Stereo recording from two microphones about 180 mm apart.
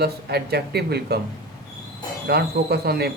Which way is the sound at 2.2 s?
60° right (ahead or behind).